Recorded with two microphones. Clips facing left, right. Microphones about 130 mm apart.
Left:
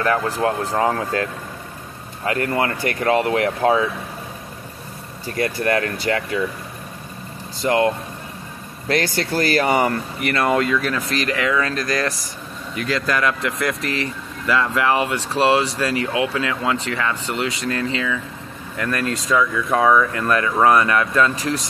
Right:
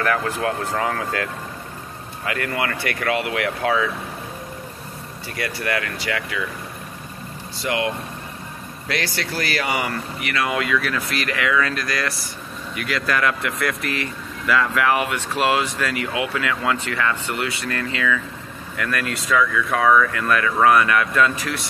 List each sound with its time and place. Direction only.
0.3 s speech: 30° left (ahead or behind)
5.3 s speech: 40° left (ahead or behind)
7.6 s speech: 40° left (ahead or behind)
19.4 s speech: 25° left (ahead or behind)